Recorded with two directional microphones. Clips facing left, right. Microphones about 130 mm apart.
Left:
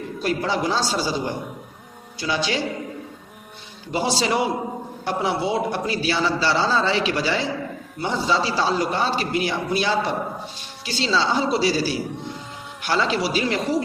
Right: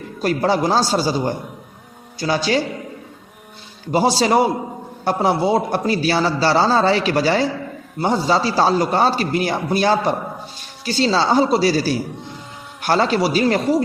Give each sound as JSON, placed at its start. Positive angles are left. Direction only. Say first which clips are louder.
{"t": 0.2, "sound": "a man's voice", "louder": "right 6 dB", "side_deg": -40}
{"t": 3.9, "sound": "a man's voice", "louder": "right 6 dB", "side_deg": -40}